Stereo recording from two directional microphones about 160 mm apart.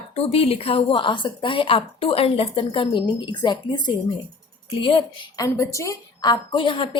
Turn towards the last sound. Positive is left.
turn(degrees=30)  # may be behind; listen again after turning